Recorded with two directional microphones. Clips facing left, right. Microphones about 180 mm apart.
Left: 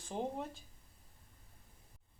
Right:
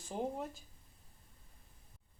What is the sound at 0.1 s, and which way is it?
Speech, 5° right (ahead or behind).